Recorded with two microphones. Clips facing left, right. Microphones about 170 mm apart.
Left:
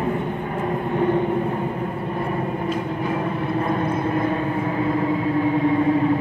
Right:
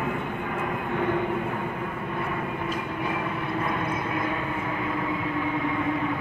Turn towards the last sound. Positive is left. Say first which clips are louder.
# left 9 dB
turn(degrees=35)  # may be behind; listen again after turning